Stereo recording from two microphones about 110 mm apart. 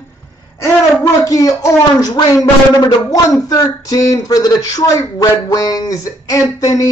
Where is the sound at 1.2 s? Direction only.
30° left (ahead or behind).